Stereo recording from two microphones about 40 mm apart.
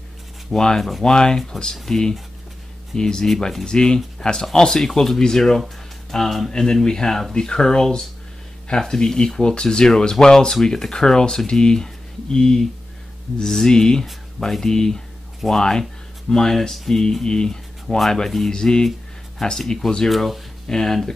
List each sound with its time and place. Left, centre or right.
0.5 s speech: centre
17.8 s speech: centre
18.5 s speech: centre
20.6 s speech: centre